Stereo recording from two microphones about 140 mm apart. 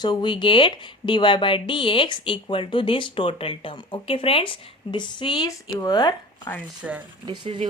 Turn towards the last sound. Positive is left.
turn(degrees=-35)  # may be behind; listen again after turning